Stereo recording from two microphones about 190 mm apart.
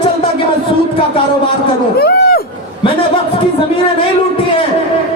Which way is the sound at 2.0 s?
55° left (ahead or behind).